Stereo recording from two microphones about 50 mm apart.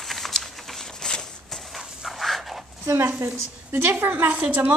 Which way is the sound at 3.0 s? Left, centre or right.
Right.